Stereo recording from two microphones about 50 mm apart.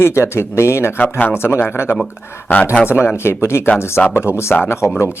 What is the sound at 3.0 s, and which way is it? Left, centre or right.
Speech, left.